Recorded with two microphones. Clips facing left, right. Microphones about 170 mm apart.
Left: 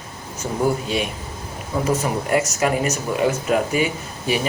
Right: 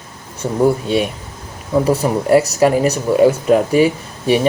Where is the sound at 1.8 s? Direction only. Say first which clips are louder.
Right 5 dB; 35° right (ahead or behind).